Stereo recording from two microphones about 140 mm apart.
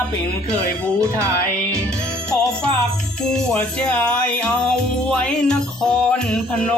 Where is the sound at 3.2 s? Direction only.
5° left (ahead or behind).